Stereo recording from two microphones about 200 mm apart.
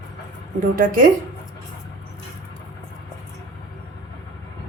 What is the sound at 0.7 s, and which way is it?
Speech, 40° right (ahead or behind).